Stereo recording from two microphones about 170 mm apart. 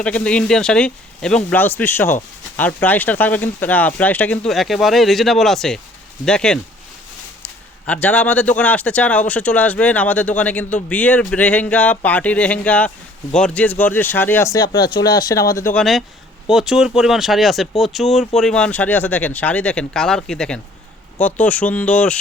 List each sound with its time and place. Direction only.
0.0 s a man's voice: 5° left (ahead or behind)
15.7 s a man's voice: centre (ahead or behind)